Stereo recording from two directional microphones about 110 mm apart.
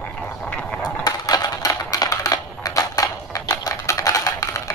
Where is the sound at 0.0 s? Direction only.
10° left (ahead or behind).